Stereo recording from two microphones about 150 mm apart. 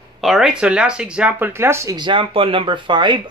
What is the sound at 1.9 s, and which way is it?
Speech, 30° right (ahead or behind).